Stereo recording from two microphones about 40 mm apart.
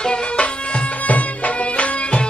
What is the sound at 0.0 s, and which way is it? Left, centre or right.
Music, left.